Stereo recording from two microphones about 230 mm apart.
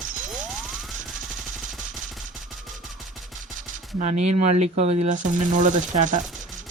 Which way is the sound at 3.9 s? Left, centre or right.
Right.